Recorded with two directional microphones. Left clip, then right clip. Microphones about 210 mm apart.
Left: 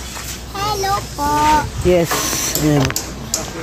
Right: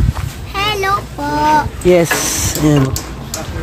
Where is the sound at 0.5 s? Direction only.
45° right (ahead or behind).